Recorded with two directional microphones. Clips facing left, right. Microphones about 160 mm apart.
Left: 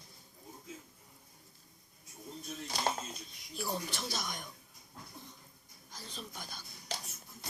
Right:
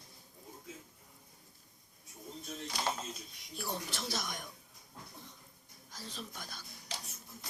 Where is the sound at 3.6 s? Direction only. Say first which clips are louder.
Left 2 dB; centre (ahead or behind).